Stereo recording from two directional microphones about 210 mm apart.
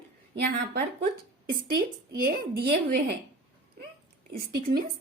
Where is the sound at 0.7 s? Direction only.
45° right (ahead or behind).